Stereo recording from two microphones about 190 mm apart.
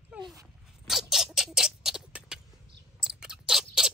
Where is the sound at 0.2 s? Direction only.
20° right (ahead or behind).